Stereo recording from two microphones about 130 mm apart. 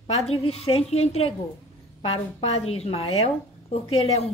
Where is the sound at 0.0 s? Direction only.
50° left (ahead or behind).